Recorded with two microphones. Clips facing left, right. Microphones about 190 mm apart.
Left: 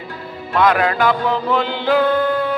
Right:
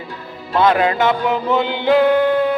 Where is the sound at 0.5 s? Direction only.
25° right (ahead or behind).